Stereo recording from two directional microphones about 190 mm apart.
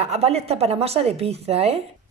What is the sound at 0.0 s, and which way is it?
Speech, 35° right (ahead or behind).